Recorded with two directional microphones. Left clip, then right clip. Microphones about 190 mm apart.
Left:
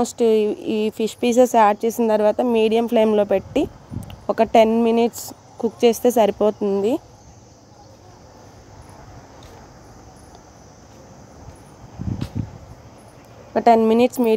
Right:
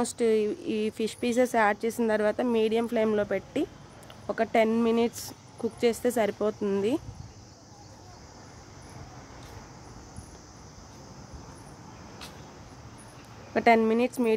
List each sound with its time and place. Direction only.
0.0 s a woman's voice: 15° left (ahead or behind)
6.3 s speech: 15° left (ahead or behind)
13.5 s a woman's voice: 10° left (ahead or behind)
13.8 s a woman's voice: 25° left (ahead or behind)